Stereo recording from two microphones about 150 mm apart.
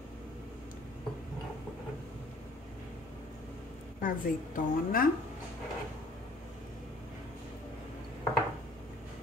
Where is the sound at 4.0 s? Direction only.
65° left (ahead or behind).